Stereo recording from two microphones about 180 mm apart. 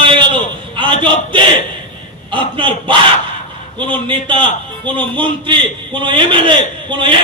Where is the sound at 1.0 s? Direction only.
30° right (ahead or behind).